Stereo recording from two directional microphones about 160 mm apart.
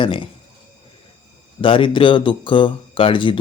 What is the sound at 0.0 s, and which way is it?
Speech, 30° left (ahead or behind).